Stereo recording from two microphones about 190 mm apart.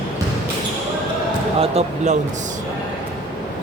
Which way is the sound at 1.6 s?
30° right (ahead or behind).